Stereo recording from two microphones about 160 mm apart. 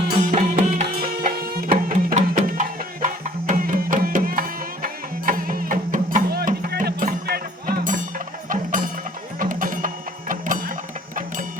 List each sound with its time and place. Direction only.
0.2 s music: 50° right (ahead or behind); by 2.1 s 65° right (ahead or behind)
2.1 s music: 45° right (ahead or behind); by 7.4 s 75° right (ahead or behind)
8.4 s music: 55° right (ahead or behind)